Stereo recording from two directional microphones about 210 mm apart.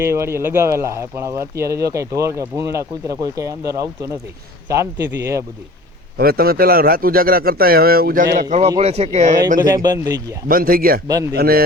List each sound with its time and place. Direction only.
0.0 s speech: 10° right (ahead or behind)
4.7 s speech: 15° right (ahead or behind)
6.1 s a man's voice: 45° right (ahead or behind)
8.5 s speech: 25° right (ahead or behind)
9.6 s speech: 20° right (ahead or behind)
10.5 s a man's voice: 45° right (ahead or behind)
11.1 s speech: 15° right (ahead or behind)
11.3 s a man's voice: 45° right (ahead or behind)